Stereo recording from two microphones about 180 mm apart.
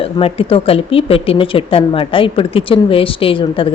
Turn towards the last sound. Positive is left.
turn(degrees=30)  # may be behind; listen again after turning